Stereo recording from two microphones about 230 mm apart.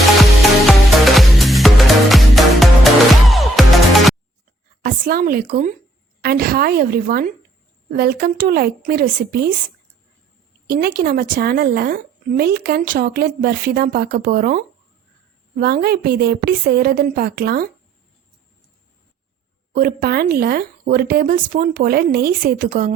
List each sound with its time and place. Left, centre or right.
0.7 s music: centre
4.8 s a woman's voice: right
10.7 s a woman's voice: right
19.7 s speech: right